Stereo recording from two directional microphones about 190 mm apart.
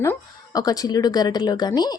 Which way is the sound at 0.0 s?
15° left (ahead or behind).